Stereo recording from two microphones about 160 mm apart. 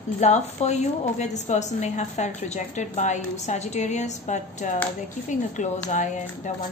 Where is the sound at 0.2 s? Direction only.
45° left (ahead or behind).